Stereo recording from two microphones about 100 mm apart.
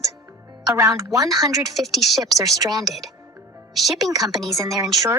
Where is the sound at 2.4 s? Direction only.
40° right (ahead or behind).